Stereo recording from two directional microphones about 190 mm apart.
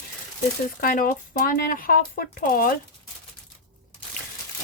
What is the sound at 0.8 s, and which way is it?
Speech, 45° left (ahead or behind).